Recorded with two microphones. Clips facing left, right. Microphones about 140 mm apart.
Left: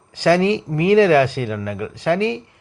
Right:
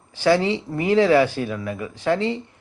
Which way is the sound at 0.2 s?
90° left.